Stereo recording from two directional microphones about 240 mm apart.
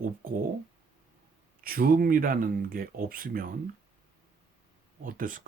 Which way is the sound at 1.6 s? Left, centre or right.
Right.